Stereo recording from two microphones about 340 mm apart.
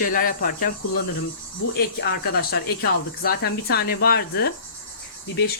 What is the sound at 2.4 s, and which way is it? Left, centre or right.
Speech, left.